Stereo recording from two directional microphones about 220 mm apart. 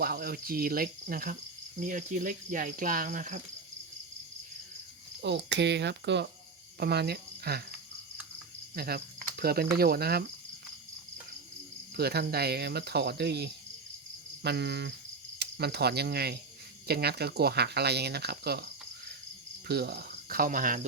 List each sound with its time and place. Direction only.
0.0 s cricket: 45° right (ahead or behind)
5.2 s speech: 50° right (ahead or behind)
6.7 s cricket: 45° right (ahead or behind)
8.7 s speech: 45° right (ahead or behind)
11.9 s speech: 45° right (ahead or behind)